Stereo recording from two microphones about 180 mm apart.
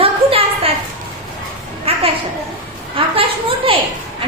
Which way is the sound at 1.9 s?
35° right (ahead or behind).